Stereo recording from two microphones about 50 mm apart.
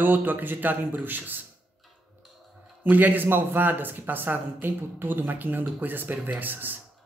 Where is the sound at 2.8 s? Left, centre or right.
Right.